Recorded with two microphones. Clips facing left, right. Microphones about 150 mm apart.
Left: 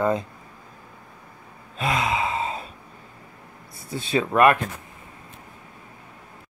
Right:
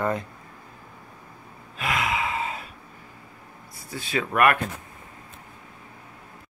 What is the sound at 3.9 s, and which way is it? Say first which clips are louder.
Speech: left 4 dB; 25° left (ahead or behind).